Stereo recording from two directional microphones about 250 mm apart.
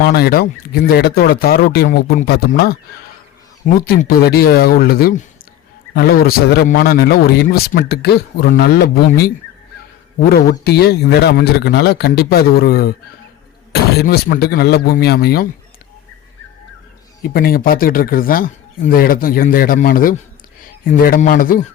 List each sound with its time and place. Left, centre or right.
0.0 s a man's voice: left
3.8 s a man's voice: left
17.2 s a man's voice: left